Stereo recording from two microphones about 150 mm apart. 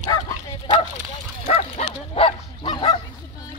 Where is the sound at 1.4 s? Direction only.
50° left (ahead or behind).